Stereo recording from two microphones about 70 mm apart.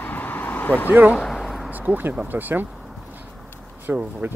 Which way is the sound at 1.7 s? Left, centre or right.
Right.